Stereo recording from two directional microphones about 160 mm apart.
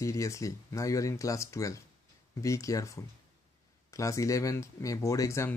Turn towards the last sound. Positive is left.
turn(degrees=15)  # may be behind; listen again after turning